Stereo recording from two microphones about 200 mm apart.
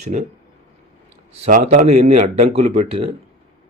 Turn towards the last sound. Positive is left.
turn(degrees=-30)  # may be behind; listen again after turning